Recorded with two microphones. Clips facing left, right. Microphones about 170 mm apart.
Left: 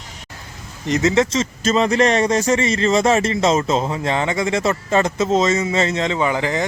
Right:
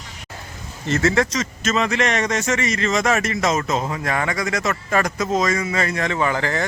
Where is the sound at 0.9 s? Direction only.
20° left (ahead or behind).